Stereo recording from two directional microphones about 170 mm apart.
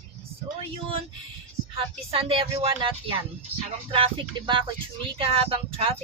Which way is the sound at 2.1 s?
35° right (ahead or behind).